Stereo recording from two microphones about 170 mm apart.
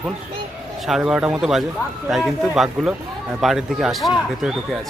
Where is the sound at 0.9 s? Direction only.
5° right (ahead or behind).